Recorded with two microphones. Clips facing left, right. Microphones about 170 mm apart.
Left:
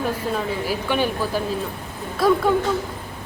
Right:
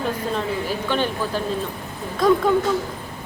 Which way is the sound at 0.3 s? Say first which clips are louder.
Even; 10° left (ahead or behind).